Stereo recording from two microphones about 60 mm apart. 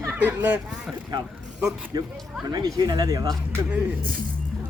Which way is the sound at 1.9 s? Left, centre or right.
Right.